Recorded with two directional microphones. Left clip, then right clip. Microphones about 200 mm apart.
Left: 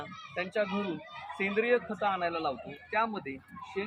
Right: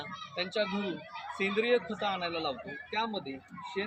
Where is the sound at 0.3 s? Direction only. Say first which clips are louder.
Left 1 dB; 25° left (ahead or behind).